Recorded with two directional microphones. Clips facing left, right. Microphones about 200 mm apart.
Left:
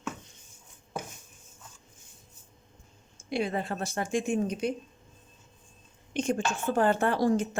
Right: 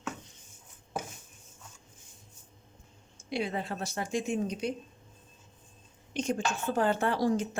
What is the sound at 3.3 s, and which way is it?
Speech, 50° left (ahead or behind).